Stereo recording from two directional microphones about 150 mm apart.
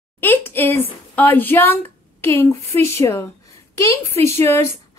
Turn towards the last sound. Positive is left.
turn(degrees=15)  # may be behind; listen again after turning